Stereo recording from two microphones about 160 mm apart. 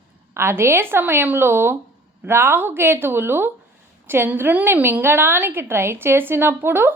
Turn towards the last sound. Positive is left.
turn(degrees=-15)  # may be behind; listen again after turning